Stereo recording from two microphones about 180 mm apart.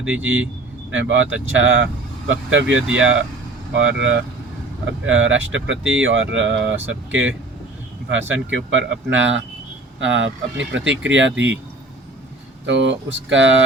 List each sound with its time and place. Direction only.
0.0 s speech: 10° right (ahead or behind)
0.9 s speech: 90° right
2.6 s speech: 5° right (ahead or behind)
2.9 s speech: 90° right
12.6 s speech: 85° right